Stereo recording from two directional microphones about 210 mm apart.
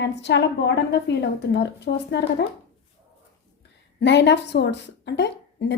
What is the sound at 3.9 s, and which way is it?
A woman's voice, 55° left (ahead or behind).